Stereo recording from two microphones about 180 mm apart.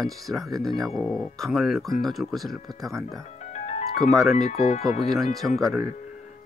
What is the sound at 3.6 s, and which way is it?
Music, 40° left (ahead or behind).